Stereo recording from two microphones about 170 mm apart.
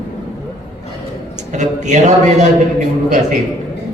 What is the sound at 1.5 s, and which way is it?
Speech, 45° right (ahead or behind).